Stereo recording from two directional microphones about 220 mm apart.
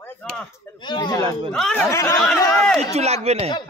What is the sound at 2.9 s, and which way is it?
Speech, 30° right (ahead or behind).